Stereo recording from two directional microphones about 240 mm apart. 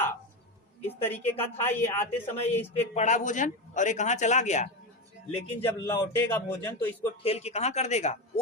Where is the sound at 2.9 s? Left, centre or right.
Left.